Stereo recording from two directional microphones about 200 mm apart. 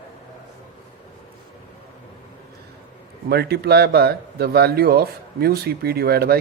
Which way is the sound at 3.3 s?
55° right (ahead or behind).